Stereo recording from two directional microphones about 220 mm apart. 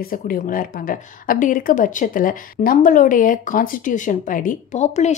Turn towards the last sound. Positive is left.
turn(degrees=30)  # may be behind; listen again after turning